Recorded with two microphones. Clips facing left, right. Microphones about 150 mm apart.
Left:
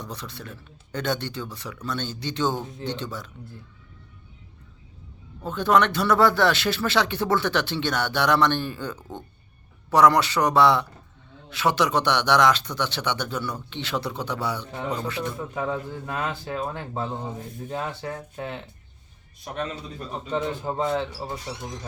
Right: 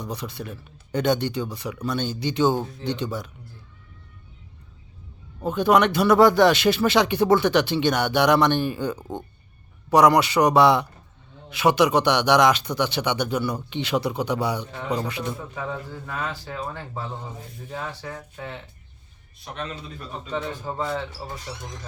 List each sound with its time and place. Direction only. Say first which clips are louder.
0.0 s speech: right 5 dB; 10° right (ahead or behind)
5.4 s speech: right 2 dB; 15° right (ahead or behind)
16.0 s a man's voice: left 1 dB; 20° left (ahead or behind)
20.3 s a man's voice: left 3 dB; 20° left (ahead or behind)